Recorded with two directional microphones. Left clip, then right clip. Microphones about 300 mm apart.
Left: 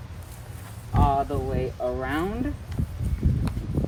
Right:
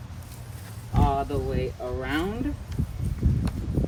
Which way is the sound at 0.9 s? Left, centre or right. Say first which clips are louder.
Left 2 dB; centre.